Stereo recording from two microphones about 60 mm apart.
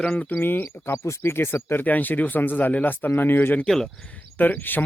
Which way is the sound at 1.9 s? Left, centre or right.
Left.